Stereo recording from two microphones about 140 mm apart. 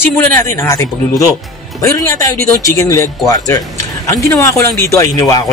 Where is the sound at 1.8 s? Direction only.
25° left (ahead or behind).